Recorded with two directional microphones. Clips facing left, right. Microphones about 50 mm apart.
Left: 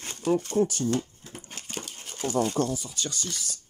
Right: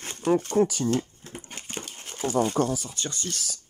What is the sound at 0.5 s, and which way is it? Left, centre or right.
Speech, right.